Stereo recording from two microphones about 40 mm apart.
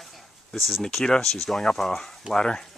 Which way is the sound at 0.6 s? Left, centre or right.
Centre.